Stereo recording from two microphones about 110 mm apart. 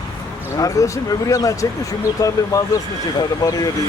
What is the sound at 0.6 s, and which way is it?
Speech, 30° left (ahead or behind).